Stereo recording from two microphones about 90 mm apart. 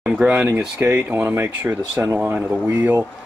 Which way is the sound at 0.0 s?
15° right (ahead or behind).